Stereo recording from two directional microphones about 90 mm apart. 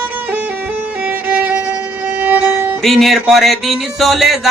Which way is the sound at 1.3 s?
15° right (ahead or behind).